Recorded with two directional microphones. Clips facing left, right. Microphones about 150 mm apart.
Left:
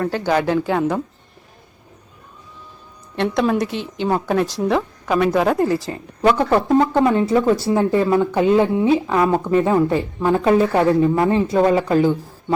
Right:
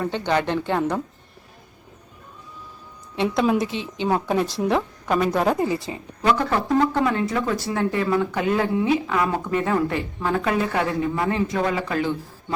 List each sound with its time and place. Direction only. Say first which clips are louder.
0.0 s a woman's voice: left 4 dB; 5° left (ahead or behind)
3.2 s a woman's voice: left 2 dB; centre (ahead or behind)
6.7 s speech: left 2 dB; 30° left (ahead or behind)